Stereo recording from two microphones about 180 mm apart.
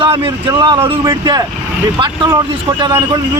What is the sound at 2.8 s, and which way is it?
Speech, 20° right (ahead or behind).